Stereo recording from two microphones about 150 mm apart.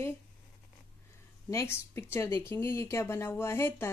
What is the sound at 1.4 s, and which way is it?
A woman's voice, 20° left (ahead or behind).